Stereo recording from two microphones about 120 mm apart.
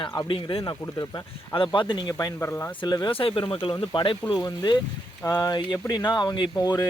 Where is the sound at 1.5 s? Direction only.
45° left (ahead or behind).